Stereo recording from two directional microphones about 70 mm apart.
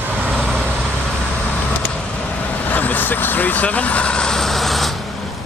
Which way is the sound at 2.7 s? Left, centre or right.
Left.